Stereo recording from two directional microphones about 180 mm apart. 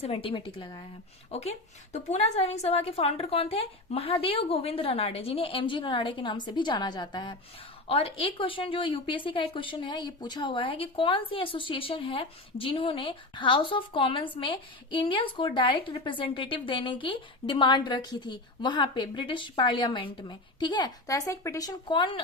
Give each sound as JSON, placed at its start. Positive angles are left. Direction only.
{"t": 0.0, "sound": "a woman's voice", "side_deg": 30}